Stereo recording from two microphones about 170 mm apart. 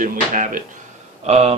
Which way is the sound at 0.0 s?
50° right (ahead or behind).